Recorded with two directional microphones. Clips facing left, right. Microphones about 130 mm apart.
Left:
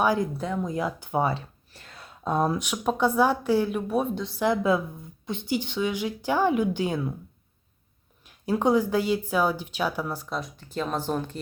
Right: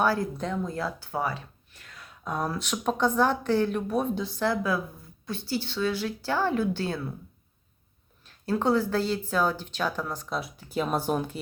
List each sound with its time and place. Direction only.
0.0 s speech: 15° left (ahead or behind)
2.7 s speech: 5° left (ahead or behind)
4.1 s speech: centre (ahead or behind)
4.4 s a woman's voice: 20° left (ahead or behind)
8.2 s speech: 15° left (ahead or behind); by 11.3 s 10° right (ahead or behind)